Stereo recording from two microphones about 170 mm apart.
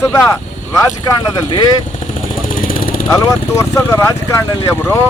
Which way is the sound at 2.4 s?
55° left (ahead or behind).